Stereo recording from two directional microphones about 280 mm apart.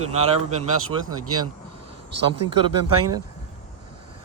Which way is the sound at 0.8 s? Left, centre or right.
Right.